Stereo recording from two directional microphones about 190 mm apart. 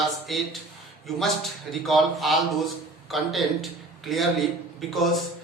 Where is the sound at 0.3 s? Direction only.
Centre (ahead or behind).